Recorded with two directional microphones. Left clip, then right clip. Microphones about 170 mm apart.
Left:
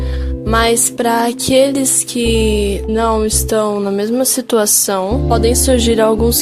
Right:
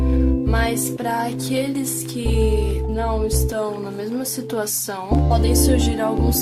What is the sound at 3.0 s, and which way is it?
Music, 60° left (ahead or behind).